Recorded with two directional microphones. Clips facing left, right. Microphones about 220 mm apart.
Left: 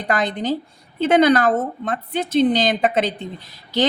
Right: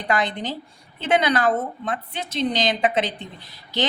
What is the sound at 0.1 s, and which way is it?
A woman's voice, 45° left (ahead or behind).